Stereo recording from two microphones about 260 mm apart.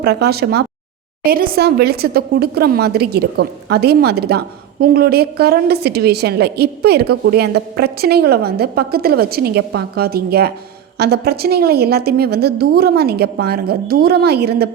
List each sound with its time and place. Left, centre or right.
0.0 s a woman's voice: right